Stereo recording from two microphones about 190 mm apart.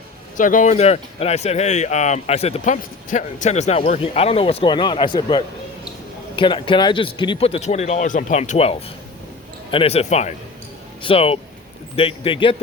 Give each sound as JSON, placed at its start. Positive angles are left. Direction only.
{"t": 0.3, "sound": "speech", "side_deg": 45}